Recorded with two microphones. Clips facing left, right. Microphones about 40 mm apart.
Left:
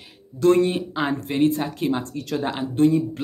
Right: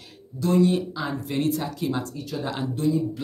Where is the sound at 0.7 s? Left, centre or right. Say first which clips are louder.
Left 2 dB; left.